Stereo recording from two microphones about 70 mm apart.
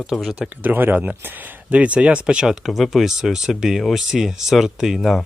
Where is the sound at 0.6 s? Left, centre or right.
Right.